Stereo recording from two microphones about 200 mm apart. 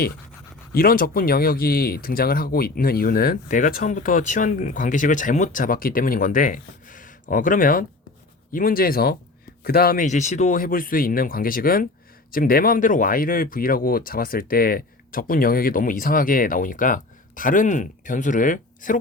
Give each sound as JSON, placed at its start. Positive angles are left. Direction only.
{"t": 0.7, "sound": "speech", "side_deg": 45}